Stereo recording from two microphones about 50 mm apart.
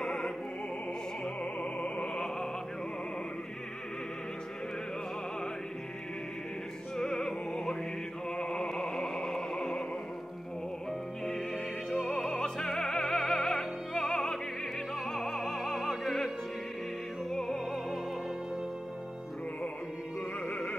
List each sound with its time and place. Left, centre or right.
0.0 s opera: centre
1.6 s music: left
7.0 s music: centre
8.4 s opera: centre
10.9 s music: centre
17.3 s music: centre
20.4 s music: left